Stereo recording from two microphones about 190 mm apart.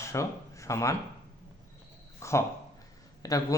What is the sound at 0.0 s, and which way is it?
Speech, 15° left (ahead or behind).